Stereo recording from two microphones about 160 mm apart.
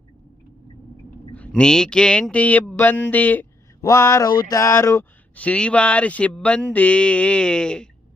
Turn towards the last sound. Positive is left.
turn(degrees=5)  # may be behind; listen again after turning